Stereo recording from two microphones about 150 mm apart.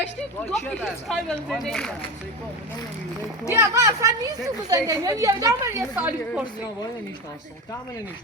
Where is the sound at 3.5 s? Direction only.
20° right (ahead or behind).